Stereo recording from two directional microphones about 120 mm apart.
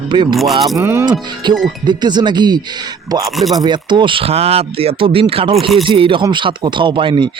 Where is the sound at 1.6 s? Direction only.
40° right (ahead or behind).